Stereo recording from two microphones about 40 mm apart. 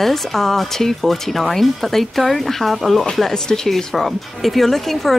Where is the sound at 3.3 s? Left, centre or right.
Centre.